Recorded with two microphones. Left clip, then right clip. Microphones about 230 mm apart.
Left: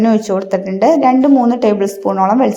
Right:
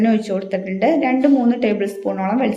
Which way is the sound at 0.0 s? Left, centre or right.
Centre.